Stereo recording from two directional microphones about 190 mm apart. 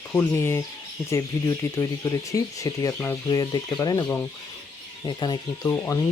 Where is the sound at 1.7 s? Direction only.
20° left (ahead or behind).